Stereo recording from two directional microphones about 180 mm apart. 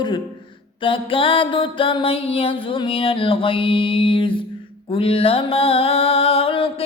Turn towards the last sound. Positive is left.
turn(degrees=30)  # may be behind; listen again after turning